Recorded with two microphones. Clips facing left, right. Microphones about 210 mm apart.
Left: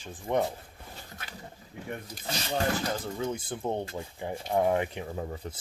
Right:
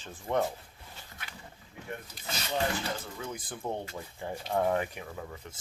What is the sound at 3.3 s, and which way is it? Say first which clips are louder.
Speech: left 5 dB; 25° left (ahead or behind).